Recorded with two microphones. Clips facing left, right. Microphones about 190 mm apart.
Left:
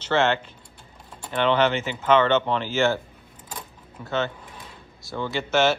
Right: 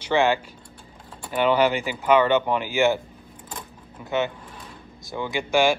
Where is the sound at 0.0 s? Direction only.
15° right (ahead or behind).